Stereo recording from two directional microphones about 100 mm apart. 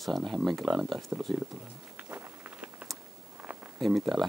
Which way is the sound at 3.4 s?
10° right (ahead or behind).